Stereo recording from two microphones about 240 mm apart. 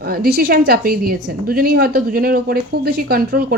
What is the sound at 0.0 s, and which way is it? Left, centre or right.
Speech, right.